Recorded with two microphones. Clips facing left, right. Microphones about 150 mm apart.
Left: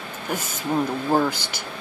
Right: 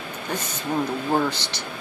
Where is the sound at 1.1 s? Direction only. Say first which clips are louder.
Left 2 dB; 10° left (ahead or behind).